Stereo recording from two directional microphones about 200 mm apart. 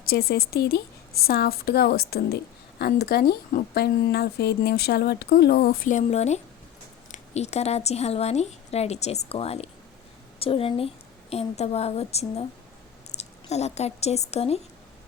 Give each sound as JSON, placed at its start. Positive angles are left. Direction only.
{"t": 0.1, "sound": "a woman's voice", "side_deg": 50}